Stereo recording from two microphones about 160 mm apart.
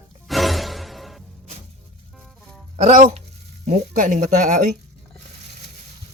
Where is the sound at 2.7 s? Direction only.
45° right (ahead or behind).